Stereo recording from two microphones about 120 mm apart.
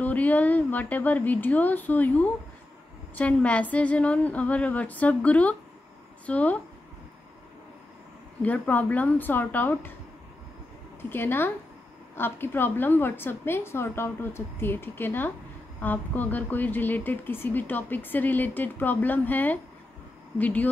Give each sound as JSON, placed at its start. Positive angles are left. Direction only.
{"t": 0.0, "sound": "a woman's voice", "side_deg": 15}
{"t": 8.4, "sound": "a woman's voice", "side_deg": 15}
{"t": 11.0, "sound": "a woman's voice", "side_deg": 15}